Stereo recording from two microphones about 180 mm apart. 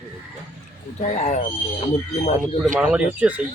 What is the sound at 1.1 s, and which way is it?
Speech, 40° left (ahead or behind).